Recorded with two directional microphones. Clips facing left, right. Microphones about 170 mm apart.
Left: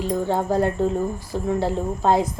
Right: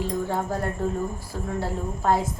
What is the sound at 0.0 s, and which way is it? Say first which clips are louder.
A woman's voice: left 4 dB; 20° left (ahead or behind).